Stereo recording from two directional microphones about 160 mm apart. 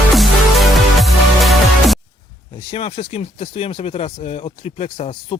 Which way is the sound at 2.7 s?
40° left (ahead or behind).